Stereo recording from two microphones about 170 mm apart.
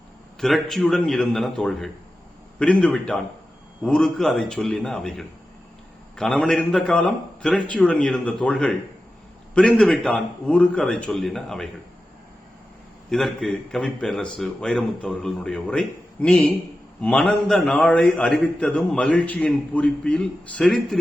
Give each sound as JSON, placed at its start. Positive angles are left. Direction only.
{"t": 0.3, "sound": "a man's voice", "side_deg": 0}
{"t": 13.1, "sound": "a man's voice", "side_deg": 5}